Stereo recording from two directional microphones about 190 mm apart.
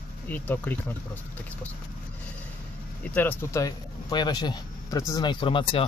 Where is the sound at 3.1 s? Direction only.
10° left (ahead or behind).